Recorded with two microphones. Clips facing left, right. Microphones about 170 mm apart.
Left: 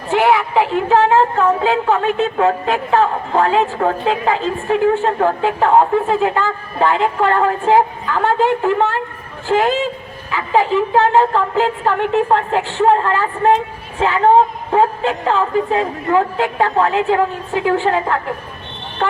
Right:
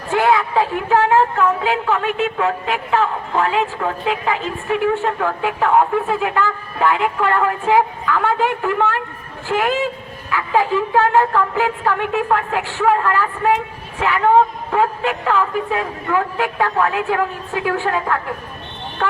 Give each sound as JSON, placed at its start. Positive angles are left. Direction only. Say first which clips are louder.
{"t": 0.1, "sound": "a woman's voice", "louder": "left 2 dB", "side_deg": 20}